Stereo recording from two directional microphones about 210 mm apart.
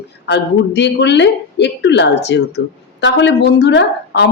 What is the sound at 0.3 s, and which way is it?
Speech, 55° left (ahead or behind).